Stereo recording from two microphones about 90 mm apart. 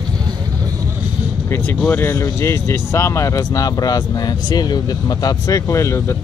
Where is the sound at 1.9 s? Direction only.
25° left (ahead or behind).